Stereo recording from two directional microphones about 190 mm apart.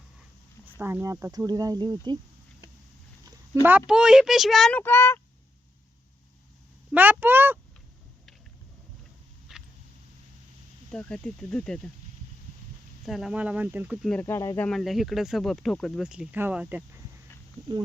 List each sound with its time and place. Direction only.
0.6 s speech: 10° right (ahead or behind)
3.2 s speech: 15° right (ahead or behind)
4.8 s speech: 10° left (ahead or behind)
6.9 s speech: 10° right (ahead or behind)
9.5 s a sound: centre (ahead or behind)
10.9 s speech: 5° left (ahead or behind)
13.1 s speech: centre (ahead or behind)
14.1 s speech: 10° left (ahead or behind); by 16.8 s 5° right (ahead or behind)